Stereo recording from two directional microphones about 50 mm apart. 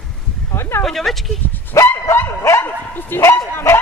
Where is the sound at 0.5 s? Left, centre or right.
Left.